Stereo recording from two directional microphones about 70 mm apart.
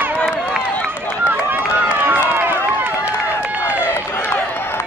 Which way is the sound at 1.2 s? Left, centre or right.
Right.